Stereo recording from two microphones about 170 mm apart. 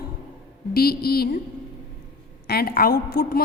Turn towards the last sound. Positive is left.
turn(degrees=60)  # may be behind; listen again after turning